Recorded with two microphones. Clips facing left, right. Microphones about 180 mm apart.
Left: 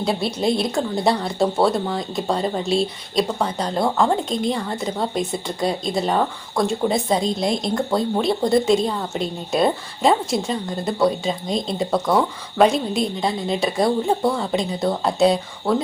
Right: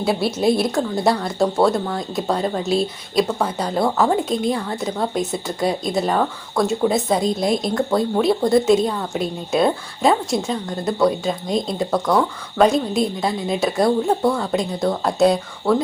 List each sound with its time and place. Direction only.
0.0 s speech: 5° right (ahead or behind)